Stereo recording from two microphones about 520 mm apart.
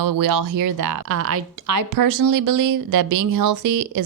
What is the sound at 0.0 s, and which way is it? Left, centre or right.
Speech, right.